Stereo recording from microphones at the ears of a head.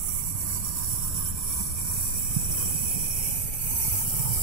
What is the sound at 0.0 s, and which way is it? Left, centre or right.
Vehicle, right.